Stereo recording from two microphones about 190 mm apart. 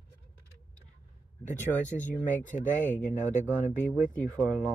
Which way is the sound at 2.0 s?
40° left (ahead or behind).